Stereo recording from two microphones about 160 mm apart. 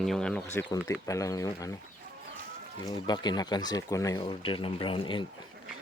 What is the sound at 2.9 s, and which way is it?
Speech, 25° left (ahead or behind).